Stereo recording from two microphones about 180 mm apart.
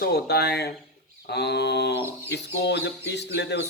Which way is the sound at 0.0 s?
65° left (ahead or behind).